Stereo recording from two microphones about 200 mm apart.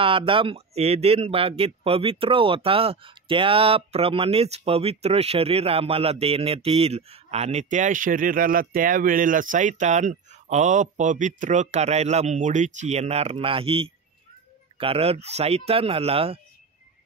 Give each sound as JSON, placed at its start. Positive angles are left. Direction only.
{"t": 0.0, "sound": "speech", "side_deg": -25}